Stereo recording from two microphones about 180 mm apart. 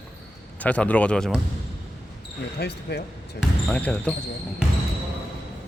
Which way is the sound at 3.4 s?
5° left (ahead or behind).